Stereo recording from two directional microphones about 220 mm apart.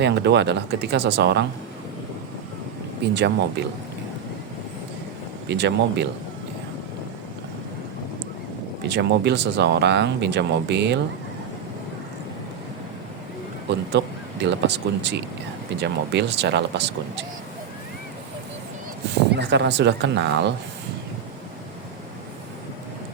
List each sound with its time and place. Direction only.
0.0 s speech: 50° right (ahead or behind)
3.0 s speech: 50° right (ahead or behind)
5.5 s speech: 50° right (ahead or behind)
8.8 s speech: 50° right (ahead or behind)
14.0 s speech: 55° right (ahead or behind)
19.3 s speech: 50° right (ahead or behind)